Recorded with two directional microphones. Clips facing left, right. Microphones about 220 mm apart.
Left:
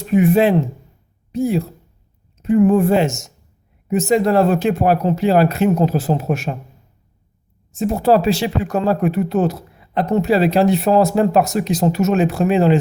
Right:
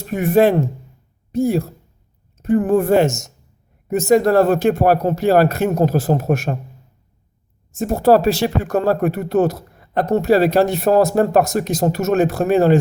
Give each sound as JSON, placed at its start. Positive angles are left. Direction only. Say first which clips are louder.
{"t": 0.1, "sound": "speech", "louder": "left 1 dB", "side_deg": -45}
{"t": 7.8, "sound": "speech", "louder": "right 1 dB", "side_deg": -45}